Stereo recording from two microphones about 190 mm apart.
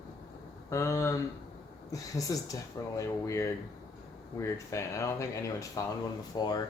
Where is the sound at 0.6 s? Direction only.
15° left (ahead or behind).